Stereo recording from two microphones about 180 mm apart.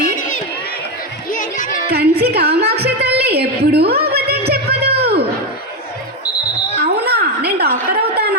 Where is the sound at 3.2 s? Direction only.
60° right (ahead or behind).